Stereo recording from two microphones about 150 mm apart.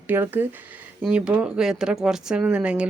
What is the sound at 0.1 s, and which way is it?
Speech, 15° right (ahead or behind).